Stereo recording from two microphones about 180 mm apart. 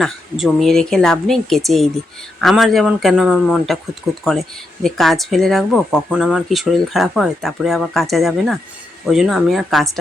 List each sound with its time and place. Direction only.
0.0 s speech: centre (ahead or behind)